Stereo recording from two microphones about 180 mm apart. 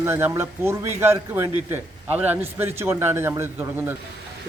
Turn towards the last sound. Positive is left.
turn(degrees=-15)  # may be behind; listen again after turning